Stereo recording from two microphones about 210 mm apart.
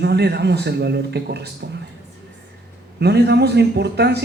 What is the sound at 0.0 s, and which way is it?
A man's voice, 50° right (ahead or behind).